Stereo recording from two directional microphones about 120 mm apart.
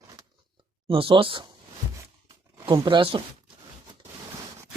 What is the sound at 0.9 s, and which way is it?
Speech, 45° right (ahead or behind).